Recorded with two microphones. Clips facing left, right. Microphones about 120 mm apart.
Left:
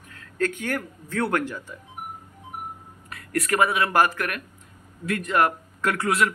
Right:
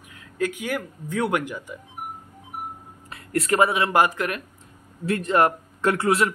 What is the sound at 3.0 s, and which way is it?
Speech, 25° right (ahead or behind).